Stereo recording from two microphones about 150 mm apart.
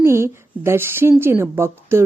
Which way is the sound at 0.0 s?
15° right (ahead or behind).